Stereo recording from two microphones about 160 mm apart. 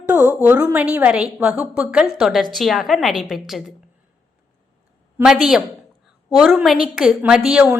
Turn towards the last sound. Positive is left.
turn(degrees=-10)  # may be behind; listen again after turning